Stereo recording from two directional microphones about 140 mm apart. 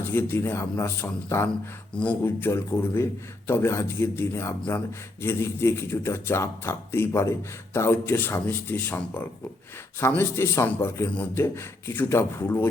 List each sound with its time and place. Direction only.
0.0 s a man's voice: 15° left (ahead or behind)